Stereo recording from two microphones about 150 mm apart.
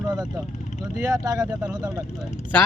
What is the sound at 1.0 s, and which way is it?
Speech, 20° right (ahead or behind).